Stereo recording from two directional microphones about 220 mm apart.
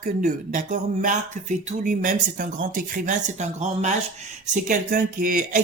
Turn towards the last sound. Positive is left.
turn(degrees=-40)  # may be behind; listen again after turning